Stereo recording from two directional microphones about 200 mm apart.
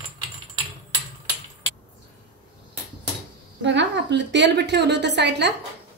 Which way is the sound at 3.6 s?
60° right (ahead or behind).